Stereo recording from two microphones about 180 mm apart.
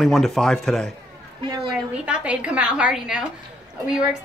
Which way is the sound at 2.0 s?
5° right (ahead or behind).